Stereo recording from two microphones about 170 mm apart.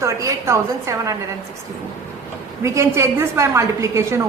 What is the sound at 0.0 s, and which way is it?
A woman's voice, 20° right (ahead or behind).